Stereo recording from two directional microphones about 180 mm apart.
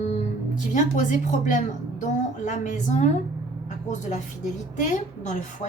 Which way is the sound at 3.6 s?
40° left (ahead or behind).